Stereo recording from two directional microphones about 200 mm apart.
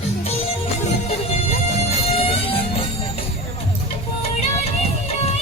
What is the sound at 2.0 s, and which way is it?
Music, 30° left (ahead or behind).